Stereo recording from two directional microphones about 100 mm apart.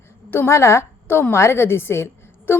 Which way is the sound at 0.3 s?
25° left (ahead or behind).